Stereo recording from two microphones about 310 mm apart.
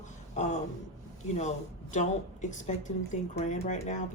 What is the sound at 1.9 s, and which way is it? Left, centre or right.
Speech, left.